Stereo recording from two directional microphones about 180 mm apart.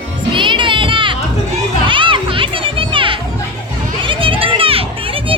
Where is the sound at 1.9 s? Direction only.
30° right (ahead or behind).